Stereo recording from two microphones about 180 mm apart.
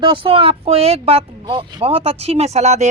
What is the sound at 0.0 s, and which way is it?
Speech, 30° right (ahead or behind).